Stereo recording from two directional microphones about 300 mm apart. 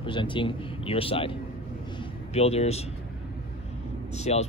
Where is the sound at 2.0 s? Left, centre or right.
Left.